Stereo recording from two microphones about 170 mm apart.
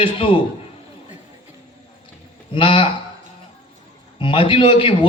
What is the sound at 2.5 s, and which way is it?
Speech, 30° left (ahead or behind).